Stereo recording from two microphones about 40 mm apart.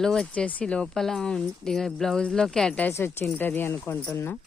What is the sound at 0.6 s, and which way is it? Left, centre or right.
Speech, left.